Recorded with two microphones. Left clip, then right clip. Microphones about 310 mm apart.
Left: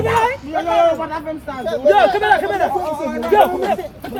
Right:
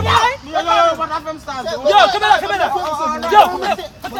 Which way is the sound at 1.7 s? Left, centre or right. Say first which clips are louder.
Right 1 dB; right.